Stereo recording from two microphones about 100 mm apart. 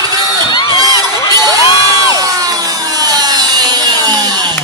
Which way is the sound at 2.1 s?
40° right (ahead or behind).